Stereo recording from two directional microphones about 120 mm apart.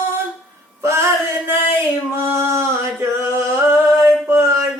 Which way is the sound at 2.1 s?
20° right (ahead or behind).